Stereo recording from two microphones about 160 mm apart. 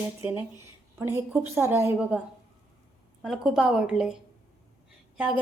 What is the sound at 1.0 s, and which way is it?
A woman's voice, 15° right (ahead or behind).